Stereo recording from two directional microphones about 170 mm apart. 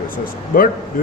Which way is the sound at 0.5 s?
55° left (ahead or behind).